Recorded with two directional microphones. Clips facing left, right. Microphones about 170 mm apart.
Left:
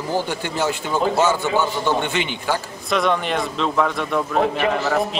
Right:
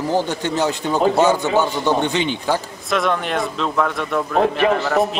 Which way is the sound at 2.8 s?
Centre (ahead or behind).